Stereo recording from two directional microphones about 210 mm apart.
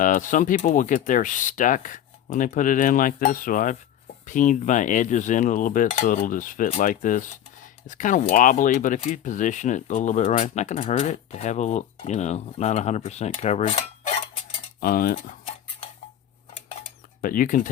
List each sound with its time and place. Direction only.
0.0 s speech: 35° left (ahead or behind)
14.8 s cutlery: 45° left (ahead or behind)
17.2 s speech: 40° left (ahead or behind)